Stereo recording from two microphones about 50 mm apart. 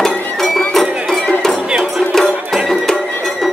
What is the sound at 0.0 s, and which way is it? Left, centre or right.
Music, centre.